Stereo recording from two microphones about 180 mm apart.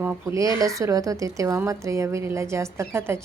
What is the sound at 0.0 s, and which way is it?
A woman's voice, 15° right (ahead or behind).